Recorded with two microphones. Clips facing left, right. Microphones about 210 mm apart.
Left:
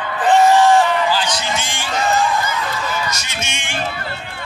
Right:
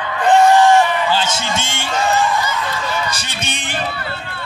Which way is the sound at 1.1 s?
25° right (ahead or behind).